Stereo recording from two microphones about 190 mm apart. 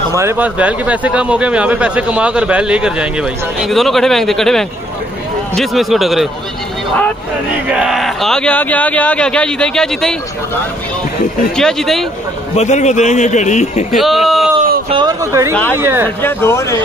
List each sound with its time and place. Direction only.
0.1 s a man's voice: 15° right (ahead or behind)
7.6 s a man's voice: 5° right (ahead or behind)
11.5 s a man's voice: centre (ahead or behind)
12.5 s a man's voice: 35° left (ahead or behind)
13.9 s speech: centre (ahead or behind)
14.9 s speech: 20° right (ahead or behind)
16.2 s speech: 10° left (ahead or behind)